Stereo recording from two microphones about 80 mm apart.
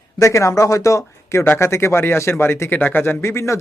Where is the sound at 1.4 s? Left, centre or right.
Left.